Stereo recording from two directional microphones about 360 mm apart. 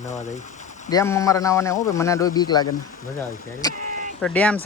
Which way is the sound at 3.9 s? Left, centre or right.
Right.